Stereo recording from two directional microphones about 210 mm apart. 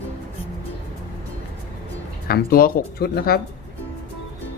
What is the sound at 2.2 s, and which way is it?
Speech, 45° left (ahead or behind).